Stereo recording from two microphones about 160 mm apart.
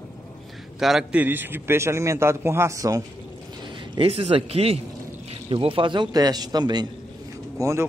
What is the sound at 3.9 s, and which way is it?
A man's voice, 40° right (ahead or behind).